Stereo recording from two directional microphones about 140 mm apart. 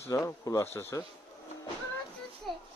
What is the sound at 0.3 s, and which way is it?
Speech, 20° left (ahead or behind).